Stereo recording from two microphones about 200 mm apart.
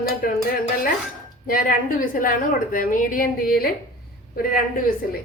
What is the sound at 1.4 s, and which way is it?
A woman's voice, 45° left (ahead or behind).